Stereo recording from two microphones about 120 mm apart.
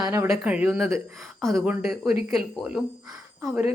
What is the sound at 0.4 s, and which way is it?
Speech, 10° right (ahead or behind).